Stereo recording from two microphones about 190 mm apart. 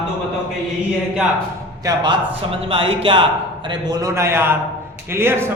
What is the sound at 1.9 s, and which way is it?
A man's voice, 25° right (ahead or behind).